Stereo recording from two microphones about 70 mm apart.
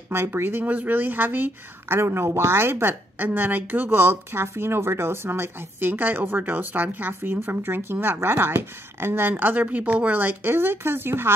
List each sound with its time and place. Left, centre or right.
0.1 s speech: right